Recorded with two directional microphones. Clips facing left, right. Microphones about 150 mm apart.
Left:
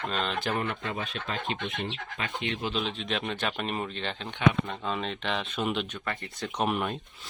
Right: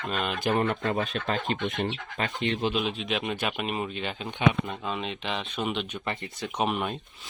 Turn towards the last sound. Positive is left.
turn(degrees=0)  # may be behind; listen again after turning